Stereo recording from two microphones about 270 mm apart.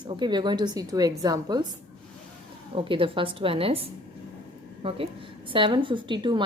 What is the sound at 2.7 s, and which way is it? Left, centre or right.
A woman's voice, centre.